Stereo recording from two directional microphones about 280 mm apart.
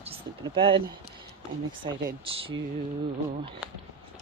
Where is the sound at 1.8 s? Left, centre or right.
Centre.